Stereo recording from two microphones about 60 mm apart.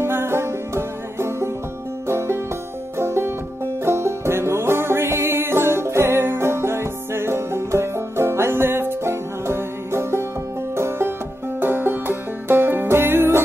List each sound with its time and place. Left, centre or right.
0.0 s music: right
10.8 s banjo: right
11.6 s music: right